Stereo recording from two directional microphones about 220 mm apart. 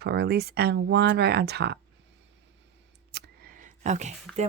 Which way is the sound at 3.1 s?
40° right (ahead or behind).